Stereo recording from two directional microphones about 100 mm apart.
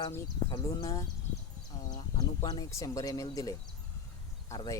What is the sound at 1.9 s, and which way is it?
Speech, 40° left (ahead or behind).